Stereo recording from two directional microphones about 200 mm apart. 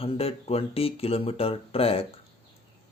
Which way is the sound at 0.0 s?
30° left (ahead or behind).